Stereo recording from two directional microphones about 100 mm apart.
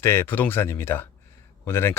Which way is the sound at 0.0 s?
25° left (ahead or behind).